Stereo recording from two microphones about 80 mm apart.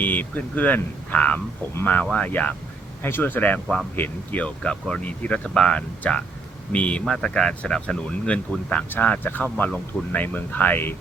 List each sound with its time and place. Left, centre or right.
0.0 s speech: left